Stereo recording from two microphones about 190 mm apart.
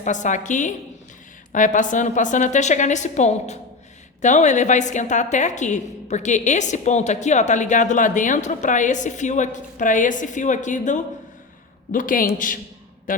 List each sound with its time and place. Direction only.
0.0 s a woman's voice: 40° left (ahead or behind)